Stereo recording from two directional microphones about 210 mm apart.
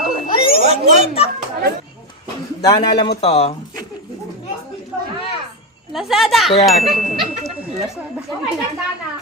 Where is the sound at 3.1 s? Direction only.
30° left (ahead or behind).